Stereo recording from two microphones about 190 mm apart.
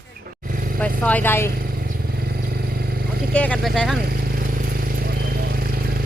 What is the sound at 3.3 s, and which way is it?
Speech, 5° left (ahead or behind).